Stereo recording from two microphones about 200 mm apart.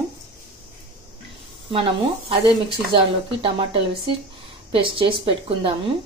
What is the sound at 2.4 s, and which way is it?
A woman's voice, 25° right (ahead or behind).